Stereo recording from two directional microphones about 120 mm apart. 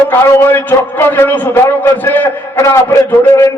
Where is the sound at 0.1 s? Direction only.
20° left (ahead or behind).